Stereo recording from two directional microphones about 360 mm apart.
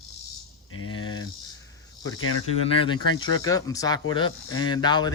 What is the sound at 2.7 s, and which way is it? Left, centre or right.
Speech, centre.